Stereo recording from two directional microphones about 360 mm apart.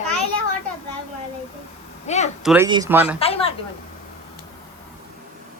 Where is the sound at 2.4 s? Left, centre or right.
Centre.